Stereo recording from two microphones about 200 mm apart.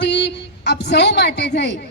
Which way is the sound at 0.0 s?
60° left (ahead or behind).